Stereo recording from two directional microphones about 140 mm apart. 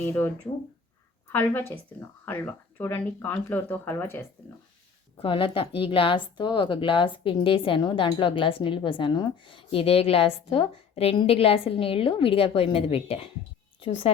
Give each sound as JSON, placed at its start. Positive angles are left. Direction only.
{"t": 1.3, "sound": "a woman's voice", "side_deg": 15}
{"t": 5.2, "sound": "a woman's voice", "side_deg": 40}